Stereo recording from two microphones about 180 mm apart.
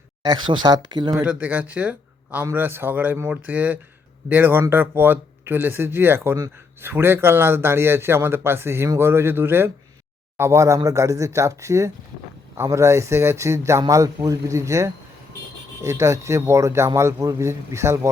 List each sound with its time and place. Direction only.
0.2 s speech: 25° right (ahead or behind)
1.1 s speech: 5° right (ahead or behind)